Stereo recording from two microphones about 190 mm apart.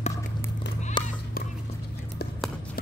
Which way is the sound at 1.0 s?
25° left (ahead or behind).